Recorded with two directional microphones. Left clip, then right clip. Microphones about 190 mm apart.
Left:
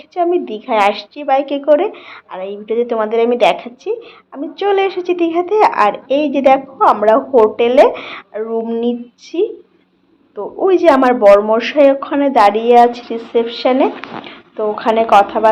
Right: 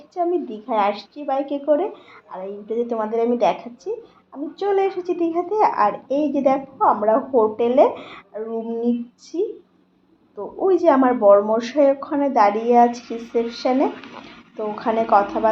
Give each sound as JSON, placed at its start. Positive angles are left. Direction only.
{"t": 0.1, "sound": "a woman's voice", "side_deg": 20}
{"t": 8.6, "sound": "a woman's voice", "side_deg": 20}
{"t": 10.7, "sound": "a woman's voice", "side_deg": 25}
{"t": 11.5, "sound": "a woman's voice", "side_deg": 20}